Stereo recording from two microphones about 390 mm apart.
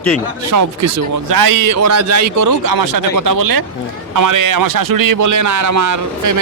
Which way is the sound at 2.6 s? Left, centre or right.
Right.